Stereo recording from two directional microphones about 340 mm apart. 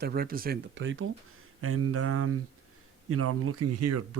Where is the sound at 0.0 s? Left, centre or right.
Right.